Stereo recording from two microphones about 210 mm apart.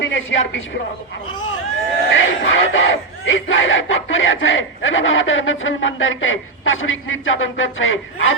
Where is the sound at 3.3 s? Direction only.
65° left (ahead or behind).